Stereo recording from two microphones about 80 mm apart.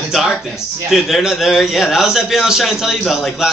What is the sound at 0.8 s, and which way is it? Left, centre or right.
A man's voice, centre.